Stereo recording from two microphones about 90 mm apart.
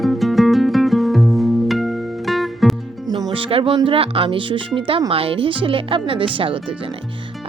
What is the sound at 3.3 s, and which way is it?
Speech, 90° right.